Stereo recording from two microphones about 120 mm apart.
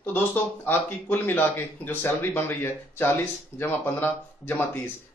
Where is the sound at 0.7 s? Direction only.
15° left (ahead or behind).